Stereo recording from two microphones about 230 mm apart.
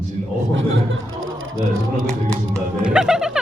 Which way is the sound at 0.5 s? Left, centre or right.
Right.